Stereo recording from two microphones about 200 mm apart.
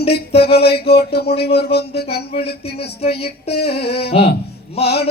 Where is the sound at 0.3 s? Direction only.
55° left (ahead or behind).